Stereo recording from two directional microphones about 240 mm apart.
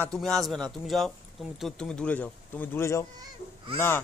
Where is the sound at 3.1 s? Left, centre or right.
Right.